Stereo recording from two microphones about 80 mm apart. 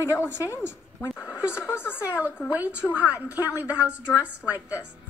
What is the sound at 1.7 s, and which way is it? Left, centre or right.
Speech, left.